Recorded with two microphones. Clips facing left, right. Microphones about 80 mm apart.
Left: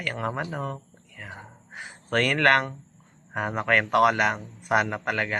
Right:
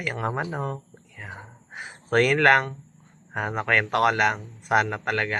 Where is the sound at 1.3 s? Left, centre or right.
Centre.